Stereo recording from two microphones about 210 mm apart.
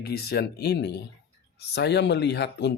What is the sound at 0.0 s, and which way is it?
Speech, 50° left (ahead or behind).